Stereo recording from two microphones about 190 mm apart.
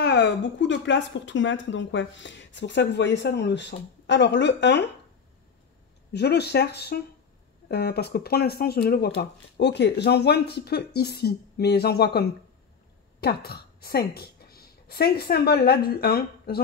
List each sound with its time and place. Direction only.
0.0 s speech: 60° left (ahead or behind)
6.1 s a woman's voice: 60° left (ahead or behind)